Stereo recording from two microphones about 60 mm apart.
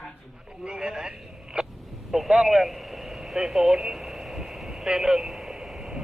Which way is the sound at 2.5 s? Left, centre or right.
Centre.